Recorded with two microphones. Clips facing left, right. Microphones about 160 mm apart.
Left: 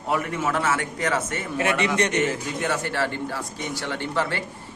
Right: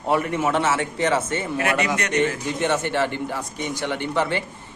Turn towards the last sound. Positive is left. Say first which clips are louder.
# right 3 dB
turn(degrees=-20)  # may be behind; listen again after turning